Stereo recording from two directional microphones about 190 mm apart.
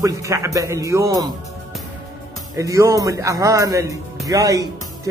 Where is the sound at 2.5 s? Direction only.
15° right (ahead or behind).